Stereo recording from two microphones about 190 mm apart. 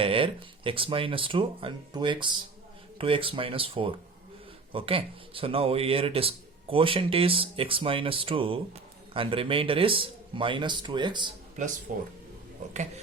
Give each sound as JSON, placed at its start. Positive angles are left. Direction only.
{"t": 0.0, "sound": "speech", "side_deg": -30}
{"t": 11.9, "sound": "speech", "side_deg": -45}